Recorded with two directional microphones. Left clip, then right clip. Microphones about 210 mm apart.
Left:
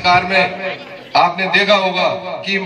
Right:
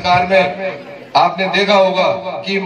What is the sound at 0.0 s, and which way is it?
A man's voice, 25° left (ahead or behind).